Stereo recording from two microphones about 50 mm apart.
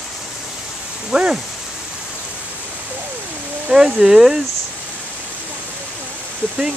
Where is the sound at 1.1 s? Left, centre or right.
Right.